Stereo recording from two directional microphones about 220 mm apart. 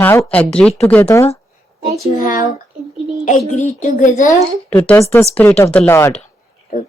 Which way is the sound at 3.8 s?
35° left (ahead or behind).